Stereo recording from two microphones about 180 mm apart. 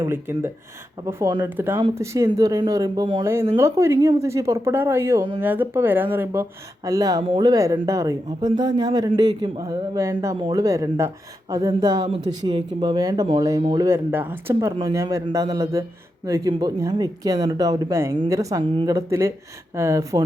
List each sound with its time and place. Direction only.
0.0 s speech: 15° right (ahead or behind)
13.8 s speech: 15° right (ahead or behind)
14.8 s speech: 25° right (ahead or behind)
18.7 s speech: 30° right (ahead or behind)
18.9 s speech: 15° right (ahead or behind)